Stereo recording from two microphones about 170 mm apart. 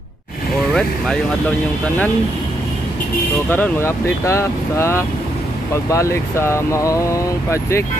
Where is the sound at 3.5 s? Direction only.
15° left (ahead or behind).